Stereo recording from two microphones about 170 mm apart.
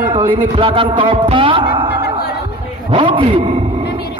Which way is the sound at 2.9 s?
35° right (ahead or behind).